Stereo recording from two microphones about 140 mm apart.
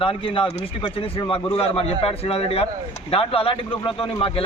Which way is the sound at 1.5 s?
45° left (ahead or behind).